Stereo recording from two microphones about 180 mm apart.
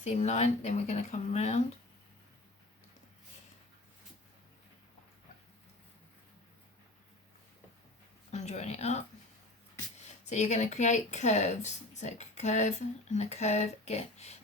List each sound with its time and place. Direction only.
0.0 s speech: 40° left (ahead or behind)
8.3 s a woman's voice: 40° left (ahead or behind)
10.2 s speech: 40° left (ahead or behind)